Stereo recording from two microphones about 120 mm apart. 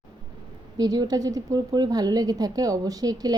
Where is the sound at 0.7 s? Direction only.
35° right (ahead or behind).